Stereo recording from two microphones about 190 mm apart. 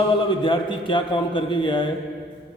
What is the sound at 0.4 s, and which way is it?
A man's voice, 25° left (ahead or behind).